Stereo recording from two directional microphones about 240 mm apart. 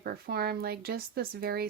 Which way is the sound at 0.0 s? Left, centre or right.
Right.